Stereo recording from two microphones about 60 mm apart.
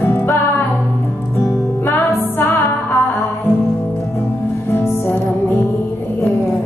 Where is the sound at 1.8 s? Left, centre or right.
Left.